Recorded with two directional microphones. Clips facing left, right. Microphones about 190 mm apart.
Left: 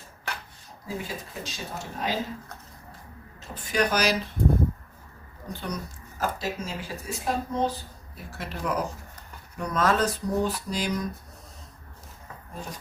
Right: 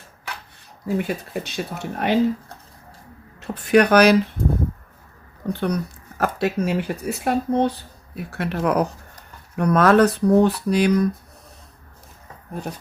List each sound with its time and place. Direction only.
0.9 s speech: 65° right (ahead or behind)
3.4 s speech: 65° right (ahead or behind)
5.5 s speech: 65° right (ahead or behind)